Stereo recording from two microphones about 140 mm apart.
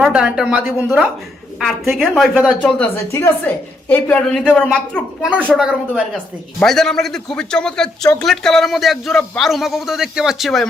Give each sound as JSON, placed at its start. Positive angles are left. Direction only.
{"t": 0.0, "sound": "a man's voice", "side_deg": -5}
{"t": 0.8, "sound": "speech", "side_deg": -15}
{"t": 1.5, "sound": "a man's voice", "side_deg": 0}
{"t": 5.5, "sound": "a man's voice", "side_deg": -5}